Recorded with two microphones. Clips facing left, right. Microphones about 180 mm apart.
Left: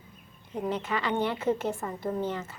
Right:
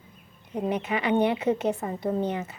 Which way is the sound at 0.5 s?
15° right (ahead or behind).